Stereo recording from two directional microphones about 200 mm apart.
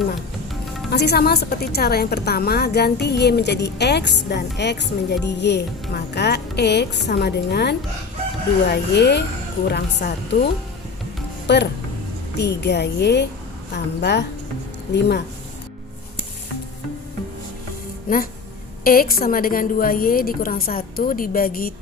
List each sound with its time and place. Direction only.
0.9 s a woman's voice: 55° left (ahead or behind)
18.1 s a woman's voice: 45° left (ahead or behind)